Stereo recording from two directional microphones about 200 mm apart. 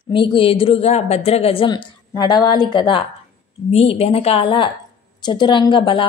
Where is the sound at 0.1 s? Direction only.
25° left (ahead or behind).